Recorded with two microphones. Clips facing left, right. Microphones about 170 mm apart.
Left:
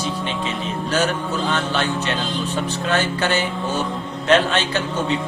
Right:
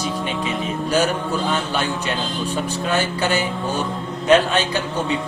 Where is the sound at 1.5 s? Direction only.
10° right (ahead or behind).